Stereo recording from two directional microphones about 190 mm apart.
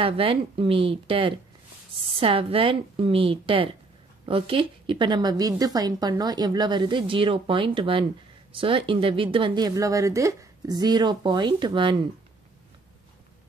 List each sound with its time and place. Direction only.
0.0 s a woman's voice: 30° right (ahead or behind)